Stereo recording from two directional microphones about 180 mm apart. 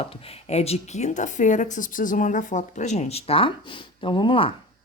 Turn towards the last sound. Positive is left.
turn(degrees=30)  # may be behind; listen again after turning